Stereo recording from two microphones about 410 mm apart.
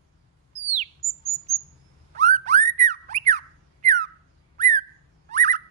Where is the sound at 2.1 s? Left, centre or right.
Centre.